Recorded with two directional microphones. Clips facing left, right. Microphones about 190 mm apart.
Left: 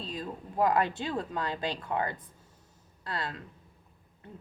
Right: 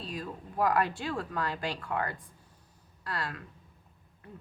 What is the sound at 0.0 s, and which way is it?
A woman's voice, 20° left (ahead or behind).